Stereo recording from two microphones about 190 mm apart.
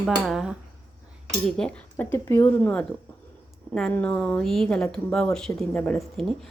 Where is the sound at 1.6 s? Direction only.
5° left (ahead or behind).